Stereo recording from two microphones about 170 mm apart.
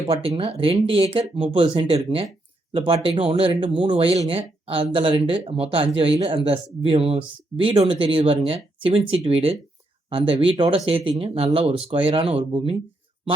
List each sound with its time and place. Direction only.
0.1 s speech: 35° right (ahead or behind)